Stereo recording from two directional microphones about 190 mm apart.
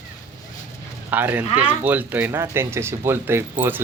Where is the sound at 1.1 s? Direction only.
10° right (ahead or behind).